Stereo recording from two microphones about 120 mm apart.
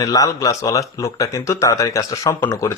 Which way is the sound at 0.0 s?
30° left (ahead or behind).